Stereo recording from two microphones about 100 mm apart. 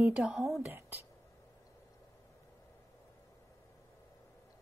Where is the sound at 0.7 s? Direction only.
20° right (ahead or behind).